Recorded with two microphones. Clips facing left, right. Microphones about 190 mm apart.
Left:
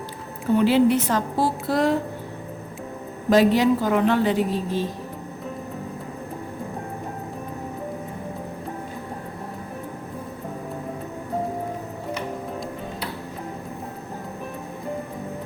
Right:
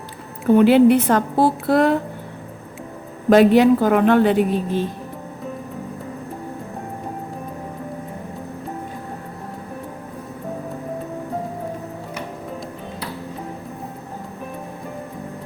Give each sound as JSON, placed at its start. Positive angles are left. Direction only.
{"t": 0.5, "sound": "a woman's voice", "side_deg": -55}
{"t": 3.2, "sound": "a woman's voice", "side_deg": -60}